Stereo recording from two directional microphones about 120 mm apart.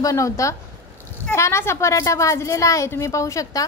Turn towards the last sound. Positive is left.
turn(degrees=25)  # may be behind; listen again after turning